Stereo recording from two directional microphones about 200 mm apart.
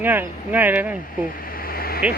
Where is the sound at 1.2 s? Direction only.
45° left (ahead or behind).